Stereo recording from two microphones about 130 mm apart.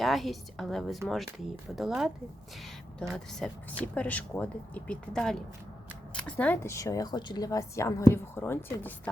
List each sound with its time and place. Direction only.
0.0 s a woman's voice: centre (ahead or behind); by 8.9 s 20° left (ahead or behind)